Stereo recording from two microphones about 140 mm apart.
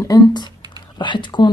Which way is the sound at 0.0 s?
30° left (ahead or behind).